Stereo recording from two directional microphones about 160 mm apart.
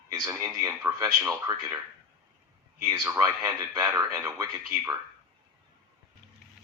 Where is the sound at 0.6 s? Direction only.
20° right (ahead or behind).